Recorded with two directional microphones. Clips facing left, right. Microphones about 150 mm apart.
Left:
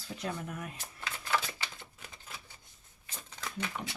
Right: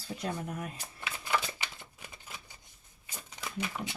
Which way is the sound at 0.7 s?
10° right (ahead or behind).